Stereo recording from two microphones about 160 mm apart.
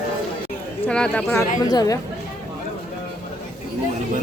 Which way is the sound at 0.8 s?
5° left (ahead or behind).